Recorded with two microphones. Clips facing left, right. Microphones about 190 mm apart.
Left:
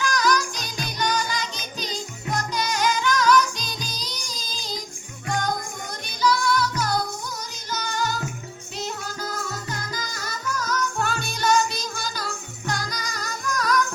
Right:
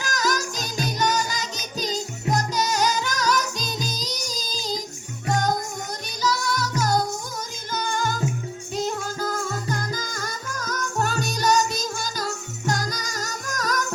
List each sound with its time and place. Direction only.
0.0 s music: 40° right (ahead or behind)